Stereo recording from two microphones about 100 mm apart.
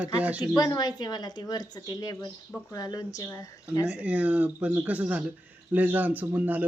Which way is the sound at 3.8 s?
15° right (ahead or behind).